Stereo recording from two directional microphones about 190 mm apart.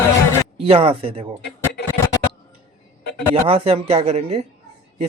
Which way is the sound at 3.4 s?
30° right (ahead or behind).